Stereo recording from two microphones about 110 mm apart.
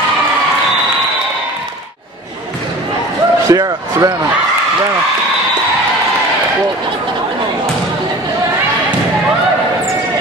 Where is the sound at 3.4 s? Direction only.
35° right (ahead or behind).